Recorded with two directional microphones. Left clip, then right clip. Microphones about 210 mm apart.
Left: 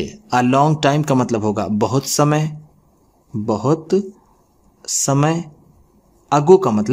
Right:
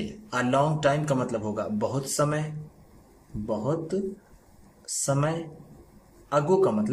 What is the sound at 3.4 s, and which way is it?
Speech, 55° left (ahead or behind).